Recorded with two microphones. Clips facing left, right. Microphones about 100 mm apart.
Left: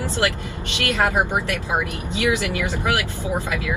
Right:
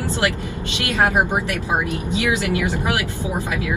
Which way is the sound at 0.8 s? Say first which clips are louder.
Right 2 dB; 20° right (ahead or behind).